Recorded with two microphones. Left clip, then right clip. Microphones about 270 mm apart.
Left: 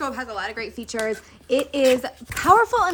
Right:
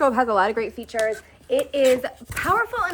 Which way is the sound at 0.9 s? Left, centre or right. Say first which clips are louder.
Right 3 dB; centre.